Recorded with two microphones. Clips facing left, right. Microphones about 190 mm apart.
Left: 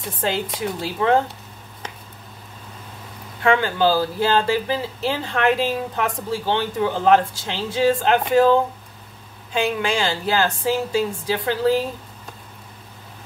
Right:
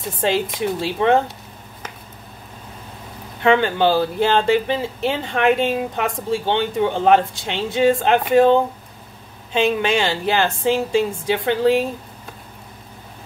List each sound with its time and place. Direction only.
0.2 s speech: 25° right (ahead or behind)
3.4 s speech: 20° right (ahead or behind)